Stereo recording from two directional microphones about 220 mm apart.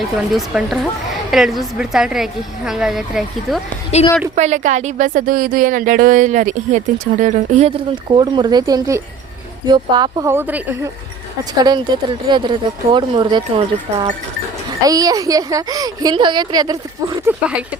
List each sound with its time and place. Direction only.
0.3 s a woman's voice: centre (ahead or behind)
3.9 s a woman's voice: 30° left (ahead or behind)
4.4 s a woman's voice: 30° right (ahead or behind)
8.1 s a woman's voice: 20° right (ahead or behind)